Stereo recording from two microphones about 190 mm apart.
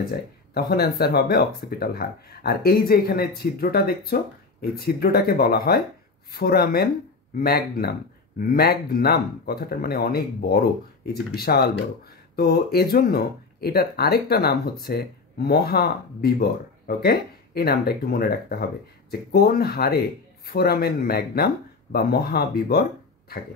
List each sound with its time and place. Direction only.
0.0 s speech: 55° left (ahead or behind)